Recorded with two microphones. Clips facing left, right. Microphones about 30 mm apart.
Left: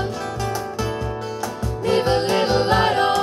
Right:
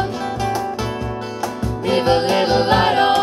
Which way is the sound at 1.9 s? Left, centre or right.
Right.